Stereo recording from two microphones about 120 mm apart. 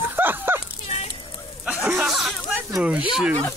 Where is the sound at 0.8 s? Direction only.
60° left (ahead or behind).